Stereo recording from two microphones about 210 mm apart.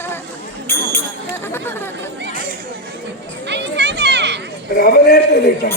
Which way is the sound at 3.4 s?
55° right (ahead or behind).